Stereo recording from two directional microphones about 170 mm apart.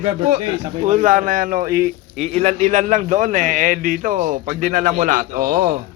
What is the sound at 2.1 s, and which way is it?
A man's voice, 40° right (ahead or behind).